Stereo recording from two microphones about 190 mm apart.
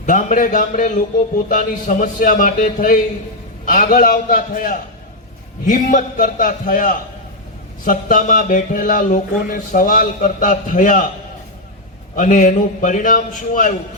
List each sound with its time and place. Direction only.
0.0 s speech: 40° left (ahead or behind)
12.1 s speech: 45° left (ahead or behind)